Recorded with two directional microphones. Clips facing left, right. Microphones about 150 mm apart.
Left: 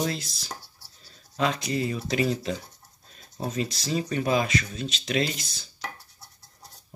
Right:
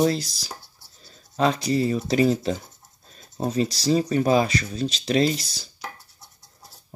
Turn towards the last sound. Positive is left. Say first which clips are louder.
# right 6 dB
turn(degrees=-35)  # may be behind; listen again after turning